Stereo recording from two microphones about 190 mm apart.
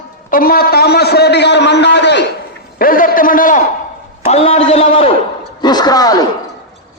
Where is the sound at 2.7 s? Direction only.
50° left (ahead or behind).